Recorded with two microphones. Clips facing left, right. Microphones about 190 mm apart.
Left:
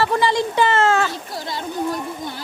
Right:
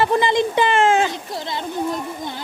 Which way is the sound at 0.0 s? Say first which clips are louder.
Right 1 dB; 20° right (ahead or behind).